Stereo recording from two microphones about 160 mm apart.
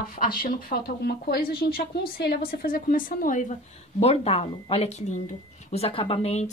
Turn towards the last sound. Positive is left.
turn(degrees=40)  # may be behind; listen again after turning